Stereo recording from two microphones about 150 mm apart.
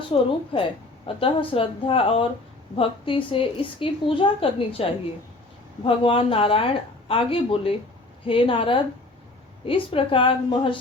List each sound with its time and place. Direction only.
0.1 s a woman's voice: 35° left (ahead or behind)